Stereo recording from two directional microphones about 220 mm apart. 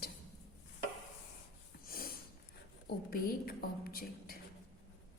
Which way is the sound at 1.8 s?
40° left (ahead or behind).